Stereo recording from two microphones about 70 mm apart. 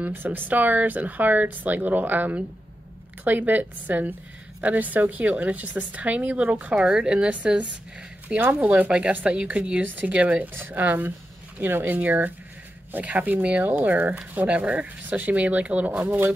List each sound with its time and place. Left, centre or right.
0.0 s a woman's voice: right